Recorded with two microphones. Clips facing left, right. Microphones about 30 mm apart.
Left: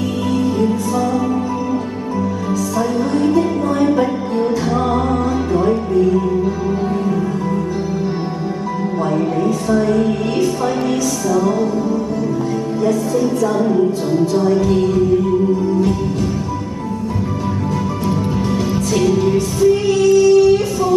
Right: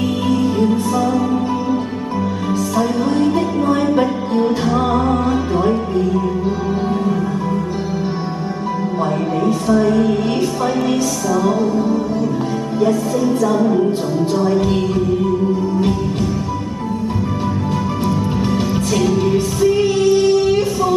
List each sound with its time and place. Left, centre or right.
2.8 s music: right
4.6 s music: centre
13.5 s music: centre
19.3 s music: right